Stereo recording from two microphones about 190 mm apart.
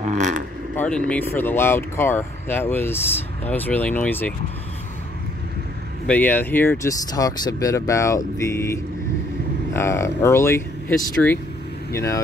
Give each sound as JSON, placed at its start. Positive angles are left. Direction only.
{"t": 0.0, "sound": "vehicle", "side_deg": -40}
{"t": 0.7, "sound": "speech", "side_deg": 5}
{"t": 6.0, "sound": "speech", "side_deg": 10}
{"t": 9.8, "sound": "speech", "side_deg": 15}